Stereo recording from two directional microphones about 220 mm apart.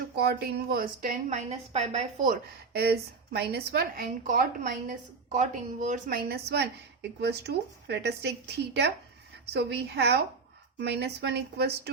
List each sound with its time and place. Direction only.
0.2 s a woman's voice: 45° right (ahead or behind)